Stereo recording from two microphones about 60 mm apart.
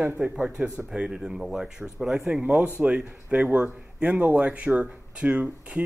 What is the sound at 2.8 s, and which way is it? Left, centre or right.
Speech, right.